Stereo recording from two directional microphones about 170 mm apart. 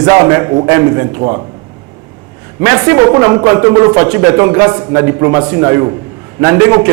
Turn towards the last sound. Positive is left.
turn(degrees=-15)  # may be behind; listen again after turning